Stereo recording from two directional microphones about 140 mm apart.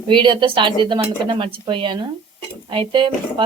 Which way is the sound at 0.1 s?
35° right (ahead or behind).